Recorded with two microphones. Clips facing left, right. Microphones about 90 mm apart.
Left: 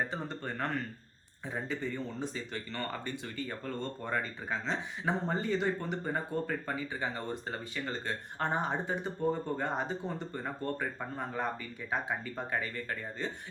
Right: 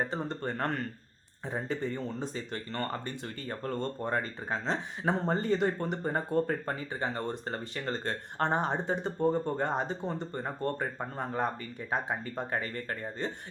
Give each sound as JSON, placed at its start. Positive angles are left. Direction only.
{"t": 0.0, "sound": "speech", "side_deg": -35}